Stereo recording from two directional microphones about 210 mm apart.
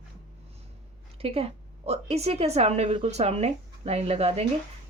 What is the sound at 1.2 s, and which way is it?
A woman's voice, 30° right (ahead or behind).